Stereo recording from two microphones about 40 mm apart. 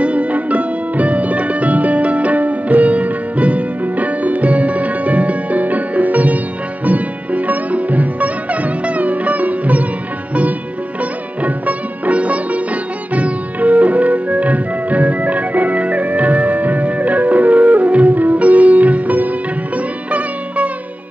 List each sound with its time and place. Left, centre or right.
0.0 s music: right
11.4 s music: right
20.1 s sitar: right